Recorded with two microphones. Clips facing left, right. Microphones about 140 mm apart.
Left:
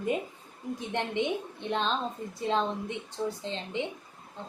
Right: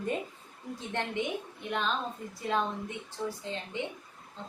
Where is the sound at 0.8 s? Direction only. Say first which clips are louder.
Left 3 dB; 20° left (ahead or behind).